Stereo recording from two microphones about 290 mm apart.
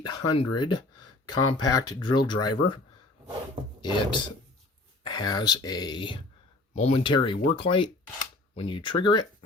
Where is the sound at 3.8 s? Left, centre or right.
Centre.